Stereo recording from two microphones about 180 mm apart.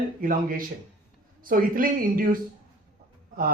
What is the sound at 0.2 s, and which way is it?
Speech, 50° right (ahead or behind).